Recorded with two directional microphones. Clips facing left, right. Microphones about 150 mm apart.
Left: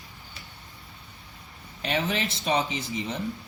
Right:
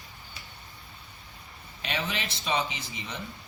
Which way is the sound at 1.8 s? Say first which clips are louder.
Left 5 dB; 40° left (ahead or behind).